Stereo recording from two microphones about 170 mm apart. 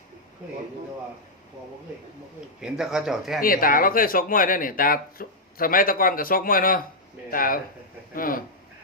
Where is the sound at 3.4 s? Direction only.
55° left (ahead or behind).